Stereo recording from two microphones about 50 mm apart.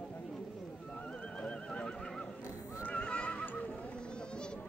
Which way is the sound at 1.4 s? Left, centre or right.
Left.